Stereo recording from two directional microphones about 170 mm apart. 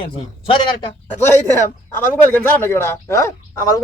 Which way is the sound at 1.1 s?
15° left (ahead or behind).